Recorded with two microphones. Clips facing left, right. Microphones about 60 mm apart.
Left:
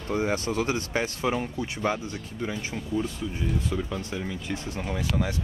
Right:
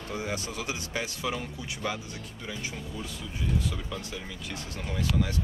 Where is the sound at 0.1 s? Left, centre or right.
Left.